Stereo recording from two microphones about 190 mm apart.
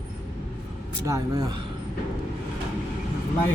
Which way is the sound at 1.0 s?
15° right (ahead or behind).